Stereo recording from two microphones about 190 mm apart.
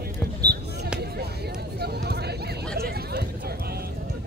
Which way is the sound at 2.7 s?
55° right (ahead or behind).